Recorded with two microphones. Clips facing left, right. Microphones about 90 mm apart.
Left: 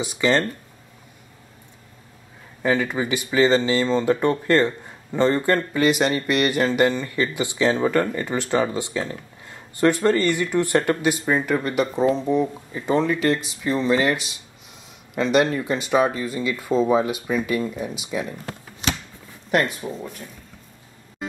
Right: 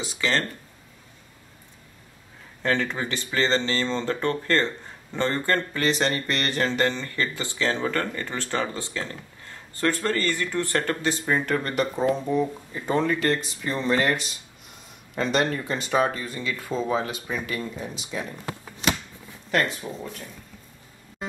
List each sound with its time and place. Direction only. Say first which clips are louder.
0.0 s speech: left 6 dB; 15° left (ahead or behind)
2.6 s speech: left 4 dB; 10° left (ahead or behind)
19.5 s speech: left 3 dB; 20° left (ahead or behind)